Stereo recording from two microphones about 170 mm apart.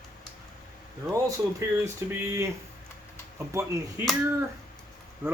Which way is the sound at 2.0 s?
15° right (ahead or behind).